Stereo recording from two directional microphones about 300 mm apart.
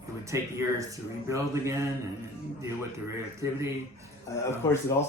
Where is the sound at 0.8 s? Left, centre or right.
Centre.